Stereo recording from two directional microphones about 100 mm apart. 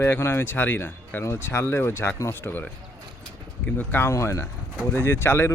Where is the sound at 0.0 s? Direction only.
25° left (ahead or behind).